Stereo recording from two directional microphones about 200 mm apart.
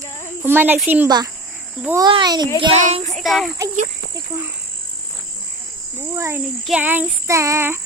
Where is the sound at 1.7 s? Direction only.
10° right (ahead or behind).